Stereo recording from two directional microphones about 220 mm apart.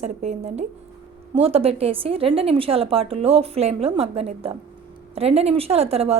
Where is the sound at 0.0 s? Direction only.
30° right (ahead or behind).